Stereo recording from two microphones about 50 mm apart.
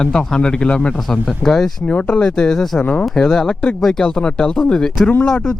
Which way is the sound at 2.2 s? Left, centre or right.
Centre.